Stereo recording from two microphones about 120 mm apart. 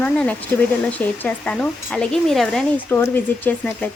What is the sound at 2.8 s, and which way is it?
A woman's voice, 15° left (ahead or behind).